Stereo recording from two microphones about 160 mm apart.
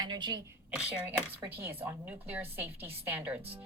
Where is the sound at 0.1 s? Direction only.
25° right (ahead or behind).